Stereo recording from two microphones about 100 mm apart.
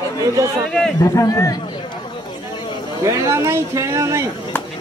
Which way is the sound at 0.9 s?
35° left (ahead or behind).